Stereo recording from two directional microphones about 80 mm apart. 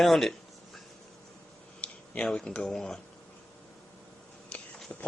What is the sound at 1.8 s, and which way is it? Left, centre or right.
Speech, centre.